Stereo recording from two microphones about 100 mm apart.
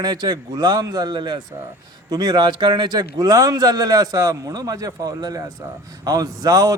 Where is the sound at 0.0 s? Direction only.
45° right (ahead or behind).